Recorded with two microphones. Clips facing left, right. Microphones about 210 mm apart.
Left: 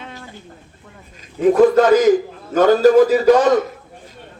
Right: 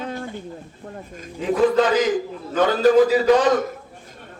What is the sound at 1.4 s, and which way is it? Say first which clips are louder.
A man's voice: left 6 dB; 50° left (ahead or behind).